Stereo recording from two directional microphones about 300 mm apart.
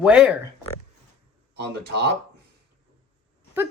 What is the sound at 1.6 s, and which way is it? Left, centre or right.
Speech, right.